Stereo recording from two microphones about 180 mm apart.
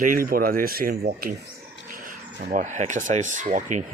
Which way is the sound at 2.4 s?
60° right (ahead or behind).